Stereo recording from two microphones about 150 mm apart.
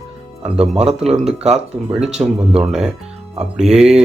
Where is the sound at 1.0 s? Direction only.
45° right (ahead or behind).